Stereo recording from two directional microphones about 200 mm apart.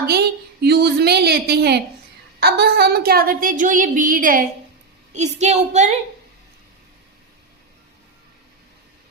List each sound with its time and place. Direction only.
0.0 s a woman's voice: 50° right (ahead or behind); by 6.0 s 35° right (ahead or behind)